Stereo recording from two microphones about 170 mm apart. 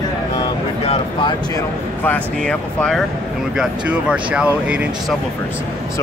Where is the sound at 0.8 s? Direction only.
35° left (ahead or behind).